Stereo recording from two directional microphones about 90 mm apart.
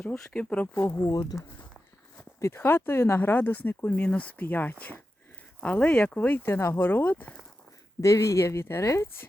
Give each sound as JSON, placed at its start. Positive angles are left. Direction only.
{"t": 0.0, "sound": "speech", "side_deg": 15}
{"t": 0.8, "sound": "a woman's voice", "side_deg": 30}
{"t": 2.4, "sound": "speech", "side_deg": 25}
{"t": 8.0, "sound": "a woman's voice", "side_deg": 35}